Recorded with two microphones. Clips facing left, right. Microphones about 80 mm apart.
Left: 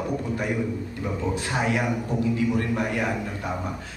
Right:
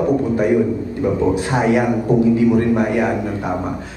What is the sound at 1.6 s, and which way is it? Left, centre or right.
A man's voice, right.